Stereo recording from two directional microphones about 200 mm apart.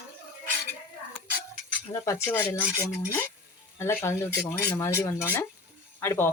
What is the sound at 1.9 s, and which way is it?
Speech, 15° left (ahead or behind).